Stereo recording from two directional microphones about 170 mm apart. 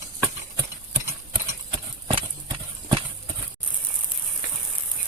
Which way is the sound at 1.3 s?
30° right (ahead or behind).